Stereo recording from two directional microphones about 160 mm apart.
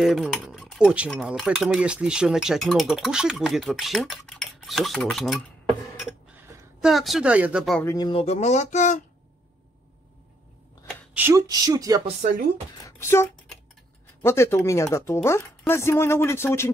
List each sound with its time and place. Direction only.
0.0 s speech: centre (ahead or behind)
6.3 s a sound: 15° right (ahead or behind)
6.8 s speech: centre (ahead or behind)
7.8 s speech: 20° left (ahead or behind)
8.1 s speech: 40° left (ahead or behind)
11.1 s speech: 15° right (ahead or behind)
12.2 s a woman's voice: 55° right (ahead or behind)
12.7 s speech: 20° left (ahead or behind)